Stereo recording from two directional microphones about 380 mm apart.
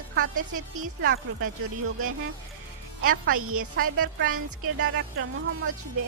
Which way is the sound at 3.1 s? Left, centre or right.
Right.